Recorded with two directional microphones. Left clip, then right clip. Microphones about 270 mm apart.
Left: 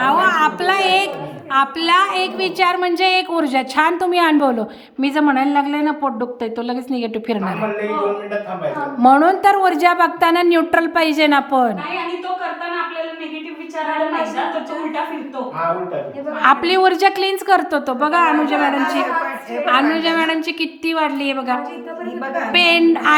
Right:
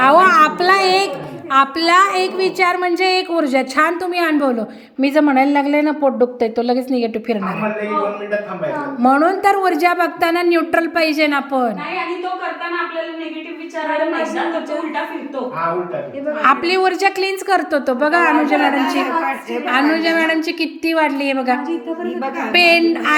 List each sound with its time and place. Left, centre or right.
0.0 s a woman's voice: centre
6.4 s a woman's voice: centre
9.0 s a woman's voice: centre
16.4 s a woman's voice: centre